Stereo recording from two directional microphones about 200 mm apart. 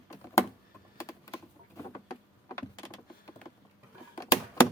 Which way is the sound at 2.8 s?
15° left (ahead or behind).